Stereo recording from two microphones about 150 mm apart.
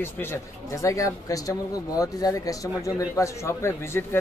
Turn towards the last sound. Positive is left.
turn(degrees=15)  # may be behind; listen again after turning